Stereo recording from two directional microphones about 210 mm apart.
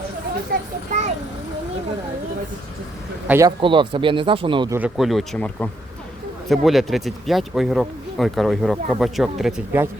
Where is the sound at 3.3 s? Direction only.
15° right (ahead or behind).